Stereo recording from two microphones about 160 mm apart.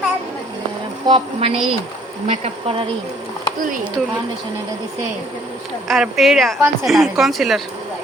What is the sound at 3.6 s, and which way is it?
Speech, 55° right (ahead or behind).